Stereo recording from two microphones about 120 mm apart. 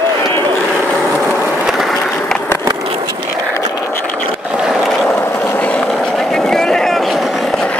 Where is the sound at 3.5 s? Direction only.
25° left (ahead or behind).